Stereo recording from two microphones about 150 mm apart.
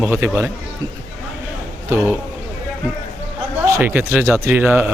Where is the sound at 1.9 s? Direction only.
10° right (ahead or behind).